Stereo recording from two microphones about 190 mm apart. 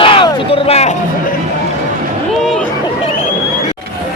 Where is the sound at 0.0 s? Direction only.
25° left (ahead or behind).